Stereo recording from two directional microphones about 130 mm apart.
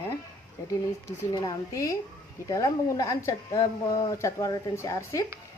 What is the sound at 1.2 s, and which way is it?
Speech, 25° left (ahead or behind).